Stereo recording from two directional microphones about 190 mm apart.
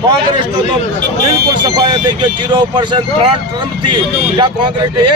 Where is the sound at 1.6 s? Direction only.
20° right (ahead or behind).